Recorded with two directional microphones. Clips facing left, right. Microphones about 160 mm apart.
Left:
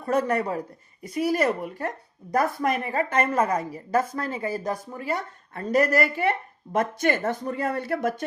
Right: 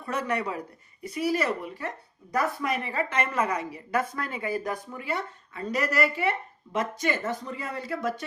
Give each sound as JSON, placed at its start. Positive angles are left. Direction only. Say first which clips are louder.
{"t": 0.0, "sound": "a woman's voice", "louder": "left 6 dB", "side_deg": 45}